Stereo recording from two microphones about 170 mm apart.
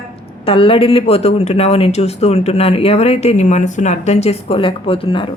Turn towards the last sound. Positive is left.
turn(degrees=30)  # may be behind; listen again after turning